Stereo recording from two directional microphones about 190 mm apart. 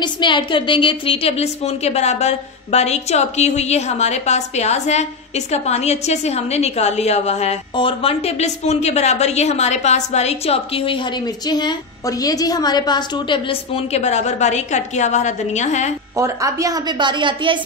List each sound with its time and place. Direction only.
0.0 s a woman's voice: 25° left (ahead or behind)
16.2 s a woman's voice: 15° right (ahead or behind)